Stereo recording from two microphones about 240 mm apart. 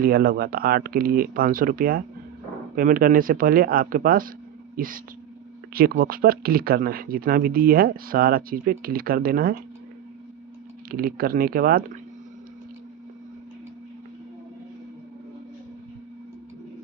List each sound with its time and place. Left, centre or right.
0.0 s speech: right
5.7 s speech: right
10.9 s speech: right